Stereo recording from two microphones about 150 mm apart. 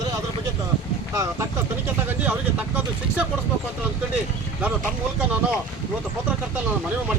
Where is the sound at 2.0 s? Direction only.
10° right (ahead or behind).